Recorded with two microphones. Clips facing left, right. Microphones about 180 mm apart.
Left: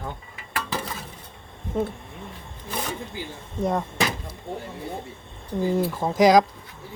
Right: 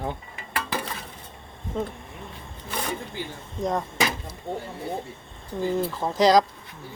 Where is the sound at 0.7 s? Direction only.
Centre (ahead or behind).